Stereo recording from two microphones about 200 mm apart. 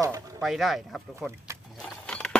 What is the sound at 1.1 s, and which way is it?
Speech, 15° right (ahead or behind).